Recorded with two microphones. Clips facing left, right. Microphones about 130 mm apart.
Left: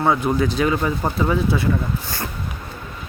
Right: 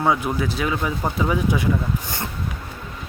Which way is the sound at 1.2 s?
15° right (ahead or behind).